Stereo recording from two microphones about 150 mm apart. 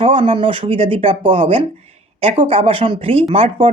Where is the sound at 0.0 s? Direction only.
35° right (ahead or behind).